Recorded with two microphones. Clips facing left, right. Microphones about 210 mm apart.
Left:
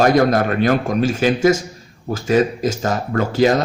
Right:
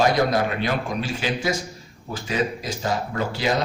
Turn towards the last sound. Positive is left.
turn(degrees=45)  # may be behind; listen again after turning